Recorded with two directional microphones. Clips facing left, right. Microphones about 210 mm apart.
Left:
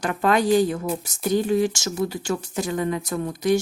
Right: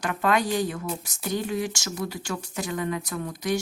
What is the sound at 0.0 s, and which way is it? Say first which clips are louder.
Speech: left 4 dB; 30° left (ahead or behind).